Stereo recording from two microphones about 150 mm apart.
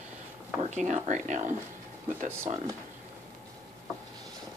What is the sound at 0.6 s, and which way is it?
Speech, 55° right (ahead or behind).